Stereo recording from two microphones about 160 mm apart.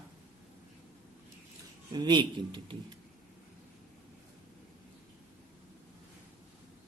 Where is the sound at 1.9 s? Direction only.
30° right (ahead or behind).